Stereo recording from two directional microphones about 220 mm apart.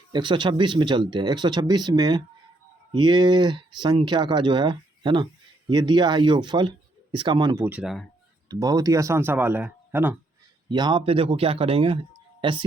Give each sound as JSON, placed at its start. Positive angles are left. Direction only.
{"t": 0.1, "sound": "speech", "side_deg": -20}
{"t": 8.4, "sound": "speech", "side_deg": -15}
{"t": 10.7, "sound": "speech", "side_deg": -20}